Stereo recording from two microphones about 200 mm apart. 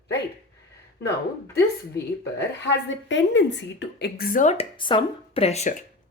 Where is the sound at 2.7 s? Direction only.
65° left (ahead or behind); by 4.6 s 40° left (ahead or behind).